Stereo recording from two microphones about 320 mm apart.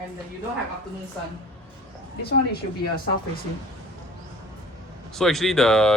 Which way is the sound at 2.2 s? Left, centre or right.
Left.